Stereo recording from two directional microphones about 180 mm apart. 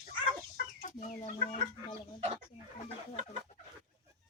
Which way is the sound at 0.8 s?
45° left (ahead or behind).